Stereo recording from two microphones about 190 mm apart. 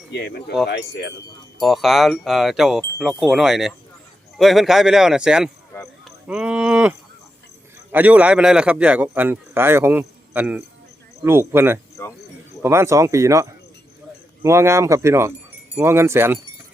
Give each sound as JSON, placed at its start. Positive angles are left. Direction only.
{"t": 0.1, "sound": "speech", "side_deg": 60}
{"t": 1.6, "sound": "speech", "side_deg": 0}
{"t": 7.9, "sound": "a man's voice", "side_deg": -10}
{"t": 12.0, "sound": "speech", "side_deg": 15}
{"t": 12.6, "sound": "a man's voice", "side_deg": -15}